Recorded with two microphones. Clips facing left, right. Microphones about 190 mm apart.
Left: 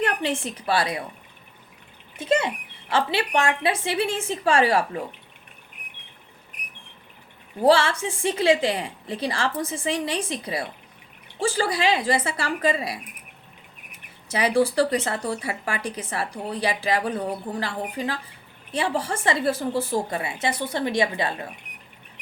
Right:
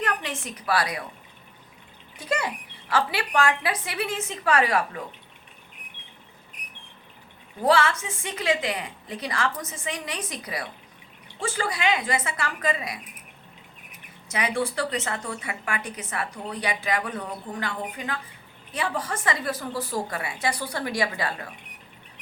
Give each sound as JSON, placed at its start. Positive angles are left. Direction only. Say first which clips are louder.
{"t": 0.0, "sound": "a woman's voice", "louder": "left 5 dB", "side_deg": 30}
{"t": 2.1, "sound": "a woman's voice", "louder": "left 5 dB", "side_deg": 25}
{"t": 7.6, "sound": "speech", "louder": "left 3 dB", "side_deg": 30}
{"t": 14.3, "sound": "a woman's voice", "louder": "left 6 dB", "side_deg": 35}